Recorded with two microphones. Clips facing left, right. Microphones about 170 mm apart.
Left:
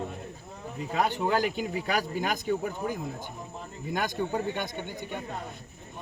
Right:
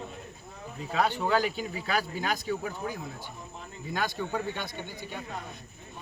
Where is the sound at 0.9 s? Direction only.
15° left (ahead or behind).